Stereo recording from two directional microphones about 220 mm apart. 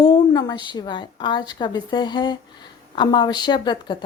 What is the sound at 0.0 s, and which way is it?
A woman's voice, 20° left (ahead or behind).